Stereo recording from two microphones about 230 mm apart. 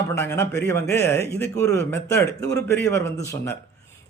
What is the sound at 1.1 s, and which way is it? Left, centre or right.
Speech, left.